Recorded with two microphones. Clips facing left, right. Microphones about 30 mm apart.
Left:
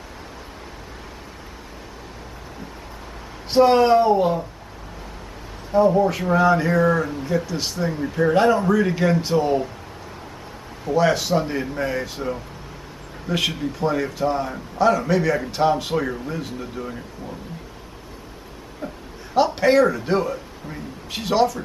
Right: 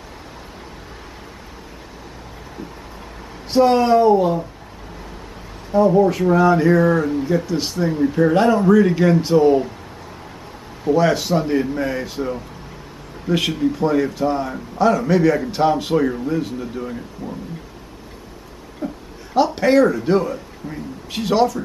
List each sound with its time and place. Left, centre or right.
3.4 s speech: centre
5.7 s speech: centre
10.8 s speech: centre
17.2 s speech: left
18.8 s a sound: centre
19.3 s speech: centre